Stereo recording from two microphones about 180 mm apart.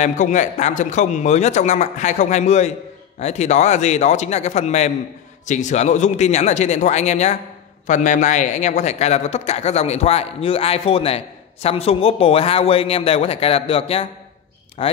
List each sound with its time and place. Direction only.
0.0 s speech: 40° left (ahead or behind)